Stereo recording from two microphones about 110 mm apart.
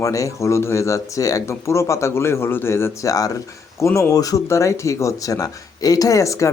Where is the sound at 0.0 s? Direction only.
30° left (ahead or behind).